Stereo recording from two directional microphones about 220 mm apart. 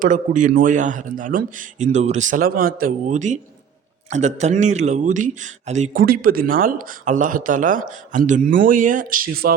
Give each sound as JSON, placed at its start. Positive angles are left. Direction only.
{"t": 0.0, "sound": "speech", "side_deg": -35}